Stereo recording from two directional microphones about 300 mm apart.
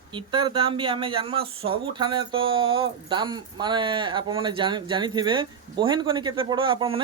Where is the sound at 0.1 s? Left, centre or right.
Centre.